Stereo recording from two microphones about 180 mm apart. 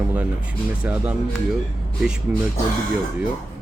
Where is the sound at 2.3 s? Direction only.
5° right (ahead or behind).